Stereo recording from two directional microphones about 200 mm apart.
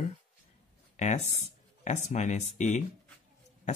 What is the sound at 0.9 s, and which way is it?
Speech, 35° left (ahead or behind).